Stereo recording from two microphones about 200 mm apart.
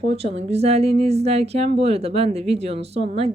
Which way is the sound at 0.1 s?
30° right (ahead or behind).